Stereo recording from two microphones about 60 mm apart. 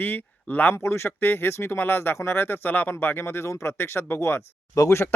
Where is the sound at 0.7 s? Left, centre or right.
Left.